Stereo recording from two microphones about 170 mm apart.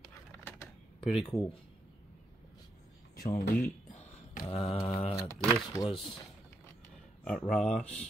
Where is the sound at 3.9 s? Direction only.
45° left (ahead or behind).